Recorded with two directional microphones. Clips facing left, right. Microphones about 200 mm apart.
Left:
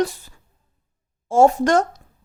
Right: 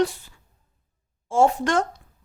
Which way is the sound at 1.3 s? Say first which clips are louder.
Left 5 dB; 40° left (ahead or behind).